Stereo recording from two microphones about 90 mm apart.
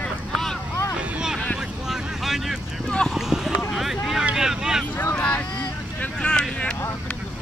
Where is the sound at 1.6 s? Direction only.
5° right (ahead or behind).